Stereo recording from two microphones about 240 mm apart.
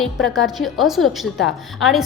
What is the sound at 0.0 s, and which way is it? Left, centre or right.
A woman's voice, centre.